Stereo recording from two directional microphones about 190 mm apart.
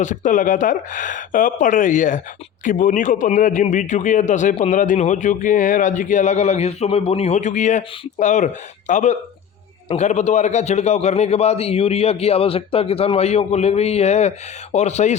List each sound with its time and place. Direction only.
0.0 s a man's voice: 40° left (ahead or behind)